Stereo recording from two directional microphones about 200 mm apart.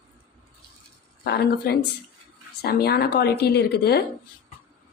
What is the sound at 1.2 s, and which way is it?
A woman's voice, 50° left (ahead or behind).